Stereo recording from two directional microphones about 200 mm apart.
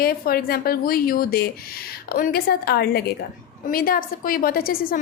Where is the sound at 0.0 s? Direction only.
50° left (ahead or behind).